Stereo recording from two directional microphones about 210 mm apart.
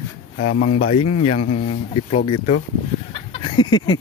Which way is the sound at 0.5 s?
45° left (ahead or behind).